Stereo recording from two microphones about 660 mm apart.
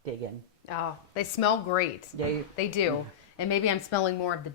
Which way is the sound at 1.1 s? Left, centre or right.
Left.